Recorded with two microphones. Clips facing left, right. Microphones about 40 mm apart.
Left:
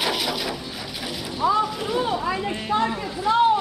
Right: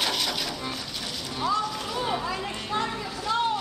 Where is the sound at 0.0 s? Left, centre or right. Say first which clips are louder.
Left 3 dB; centre.